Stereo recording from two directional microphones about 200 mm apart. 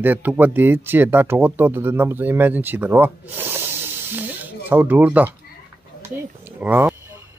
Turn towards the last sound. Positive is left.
turn(degrees=-10)  # may be behind; listen again after turning